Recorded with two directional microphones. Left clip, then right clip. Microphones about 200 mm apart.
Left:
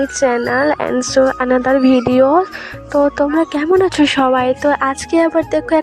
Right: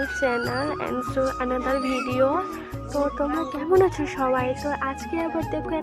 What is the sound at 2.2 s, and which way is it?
Speech, 45° left (ahead or behind).